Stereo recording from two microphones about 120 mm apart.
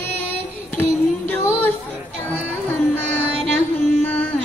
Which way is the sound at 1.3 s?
15° left (ahead or behind).